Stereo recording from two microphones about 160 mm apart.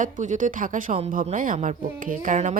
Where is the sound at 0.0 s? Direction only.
55° right (ahead or behind).